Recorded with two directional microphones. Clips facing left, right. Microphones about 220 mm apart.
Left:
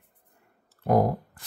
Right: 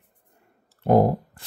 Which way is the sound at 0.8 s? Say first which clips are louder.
Right 4 dB; 30° right (ahead or behind).